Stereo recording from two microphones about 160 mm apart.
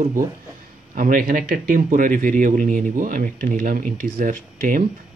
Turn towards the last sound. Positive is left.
turn(degrees=-55)  # may be behind; listen again after turning